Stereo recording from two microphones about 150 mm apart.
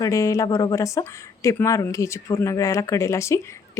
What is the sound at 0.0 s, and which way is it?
Speech, 20° left (ahead or behind).